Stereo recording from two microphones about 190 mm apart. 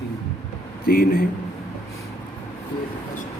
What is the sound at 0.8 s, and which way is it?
Speech, 50° left (ahead or behind).